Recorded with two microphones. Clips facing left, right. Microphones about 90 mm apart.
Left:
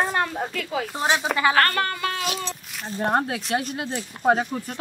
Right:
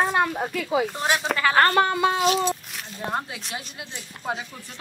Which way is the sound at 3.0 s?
60° left (ahead or behind).